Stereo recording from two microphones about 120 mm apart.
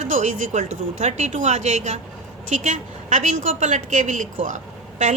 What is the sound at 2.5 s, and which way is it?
A woman's voice, 90° right.